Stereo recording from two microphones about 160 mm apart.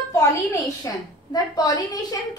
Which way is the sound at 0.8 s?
25° left (ahead or behind).